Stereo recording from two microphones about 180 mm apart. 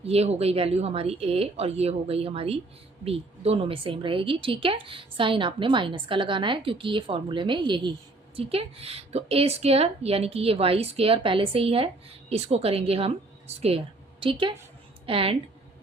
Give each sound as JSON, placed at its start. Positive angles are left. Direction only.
{"t": 0.0, "sound": "a woman's voice", "side_deg": -35}